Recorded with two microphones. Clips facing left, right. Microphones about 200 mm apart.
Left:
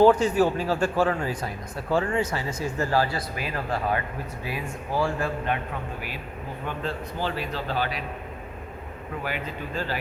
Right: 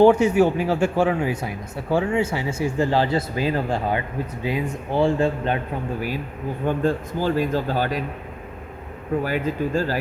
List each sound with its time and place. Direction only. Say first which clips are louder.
0.1 s speech: right 4 dB; 10° right (ahead or behind)
2.0 s speech: right 4 dB; 10° right (ahead or behind)
2.7 s speech: right 4 dB; 20° right (ahead or behind)
6.7 s a man's voice: right 10 dB; 45° right (ahead or behind)
9.2 s a man's voice: right 6 dB; 40° right (ahead or behind)